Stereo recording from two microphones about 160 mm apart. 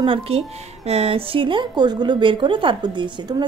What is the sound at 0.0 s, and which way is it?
A woman's voice, 30° right (ahead or behind).